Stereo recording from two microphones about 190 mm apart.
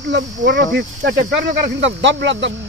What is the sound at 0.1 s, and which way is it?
Speech, 70° right (ahead or behind).